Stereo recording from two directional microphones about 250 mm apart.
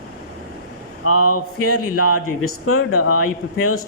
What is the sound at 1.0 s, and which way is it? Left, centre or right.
Speech, left.